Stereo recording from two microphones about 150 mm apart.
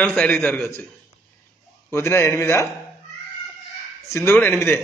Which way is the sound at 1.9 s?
15° left (ahead or behind).